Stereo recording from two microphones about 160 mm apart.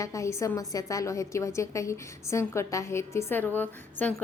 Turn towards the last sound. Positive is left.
turn(degrees=10)  # may be behind; listen again after turning